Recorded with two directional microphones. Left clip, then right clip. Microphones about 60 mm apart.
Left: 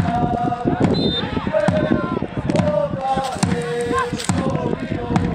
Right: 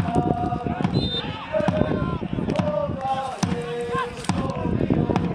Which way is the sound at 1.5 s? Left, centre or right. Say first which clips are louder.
Left 4 dB; left.